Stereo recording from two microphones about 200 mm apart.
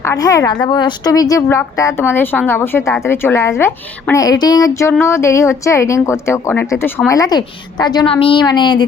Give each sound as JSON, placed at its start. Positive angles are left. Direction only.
{"t": 0.0, "sound": "a woman's voice", "side_deg": 15}